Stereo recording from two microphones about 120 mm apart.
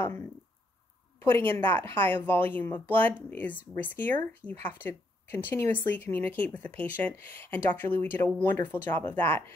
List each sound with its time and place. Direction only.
0.0 s speech: 20° left (ahead or behind)